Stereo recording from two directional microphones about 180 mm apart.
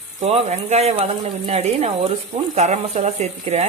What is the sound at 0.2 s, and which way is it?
Speech, 35° right (ahead or behind).